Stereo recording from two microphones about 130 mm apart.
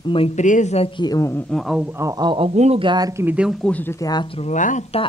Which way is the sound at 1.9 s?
20° right (ahead or behind).